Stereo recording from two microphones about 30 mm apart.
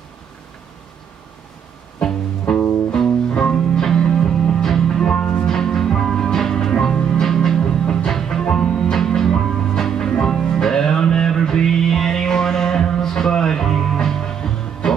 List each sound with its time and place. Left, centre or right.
2.0 s music: centre
3.7 s music: centre
5.5 s music: centre